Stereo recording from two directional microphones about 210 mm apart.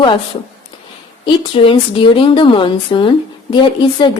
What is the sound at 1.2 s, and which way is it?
Speech, 25° left (ahead or behind).